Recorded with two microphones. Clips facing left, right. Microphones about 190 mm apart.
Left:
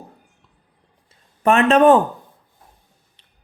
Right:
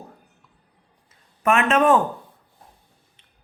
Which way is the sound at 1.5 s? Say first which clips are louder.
Left 5 dB; 35° left (ahead or behind).